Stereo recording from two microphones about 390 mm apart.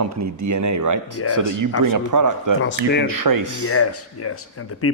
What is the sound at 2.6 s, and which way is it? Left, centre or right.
Speech, left.